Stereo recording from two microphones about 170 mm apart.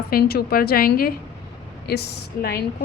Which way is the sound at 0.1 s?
65° left (ahead or behind).